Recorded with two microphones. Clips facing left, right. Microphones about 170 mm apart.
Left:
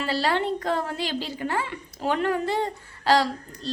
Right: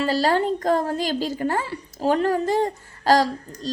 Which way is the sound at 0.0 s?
40° right (ahead or behind).